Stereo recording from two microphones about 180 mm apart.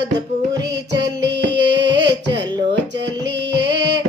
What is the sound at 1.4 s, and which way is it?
Singing, 75° right (ahead or behind).